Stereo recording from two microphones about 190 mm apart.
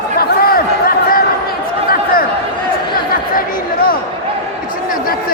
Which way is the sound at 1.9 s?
50° left (ahead or behind).